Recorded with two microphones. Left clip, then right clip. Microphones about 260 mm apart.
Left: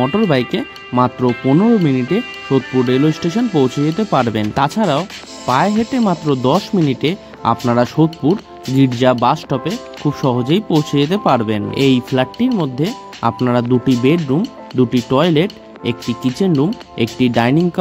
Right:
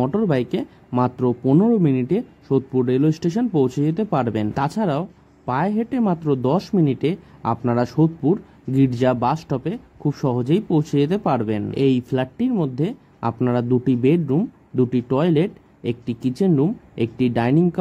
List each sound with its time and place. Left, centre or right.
0.0 s speech: left